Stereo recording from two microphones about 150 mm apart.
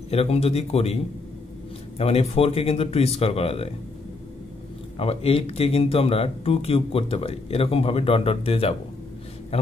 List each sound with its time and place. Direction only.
0.1 s a man's voice: 40° left (ahead or behind)
2.0 s speech: 40° left (ahead or behind)
4.9 s a man's voice: 40° left (ahead or behind)